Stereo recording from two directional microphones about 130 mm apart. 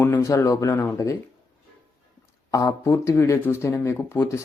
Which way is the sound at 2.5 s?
25° left (ahead or behind).